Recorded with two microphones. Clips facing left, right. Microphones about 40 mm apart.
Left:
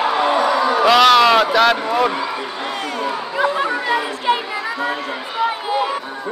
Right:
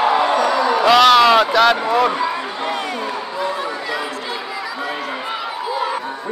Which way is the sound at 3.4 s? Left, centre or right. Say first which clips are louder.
Left 6 dB; left.